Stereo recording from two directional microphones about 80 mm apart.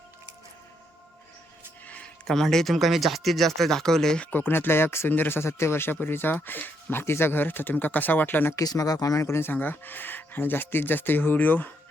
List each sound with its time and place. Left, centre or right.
2.2 s speech: centre; by 8.5 s left
8.5 s speech: left